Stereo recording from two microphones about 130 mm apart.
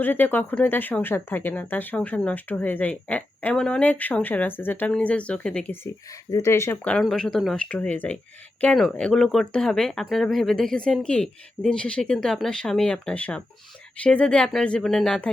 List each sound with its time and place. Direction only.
0.0 s speech: 15° left (ahead or behind)
5.8 s speech: 25° left (ahead or behind); by 15.3 s 5° left (ahead or behind)